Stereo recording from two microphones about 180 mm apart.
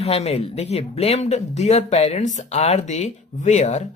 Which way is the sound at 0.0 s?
35° left (ahead or behind).